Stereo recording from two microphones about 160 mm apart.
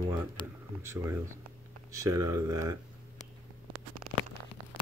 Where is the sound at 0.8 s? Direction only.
15° right (ahead or behind).